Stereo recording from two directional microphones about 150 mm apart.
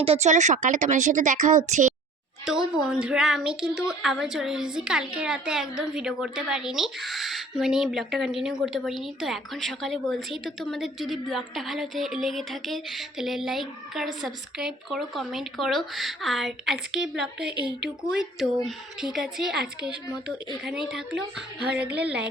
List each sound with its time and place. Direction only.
0.0 s a woman's voice: 45° right (ahead or behind)
2.5 s a woman's voice: 5° right (ahead or behind)
22.0 s music: 5° right (ahead or behind)